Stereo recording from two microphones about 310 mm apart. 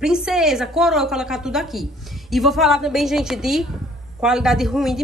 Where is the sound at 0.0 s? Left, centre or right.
Centre.